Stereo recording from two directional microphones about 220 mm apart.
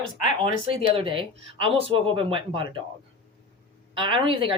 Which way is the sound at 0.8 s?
25° right (ahead or behind).